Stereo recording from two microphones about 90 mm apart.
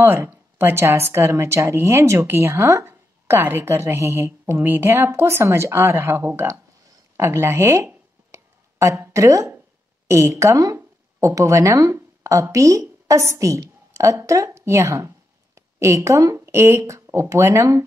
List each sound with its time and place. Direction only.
0.0 s a woman's voice: 25° right (ahead or behind)
8.3 s a sound: 35° right (ahead or behind)
10.0 s speech: 30° right (ahead or behind)